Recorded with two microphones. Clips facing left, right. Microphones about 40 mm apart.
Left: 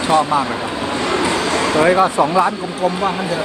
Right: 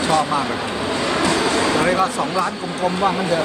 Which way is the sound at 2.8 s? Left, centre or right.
Centre.